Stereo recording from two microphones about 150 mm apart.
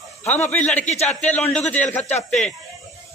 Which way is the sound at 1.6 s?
10° left (ahead or behind).